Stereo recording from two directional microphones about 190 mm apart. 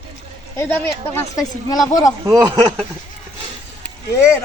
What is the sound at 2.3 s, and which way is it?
Speech, 20° right (ahead or behind).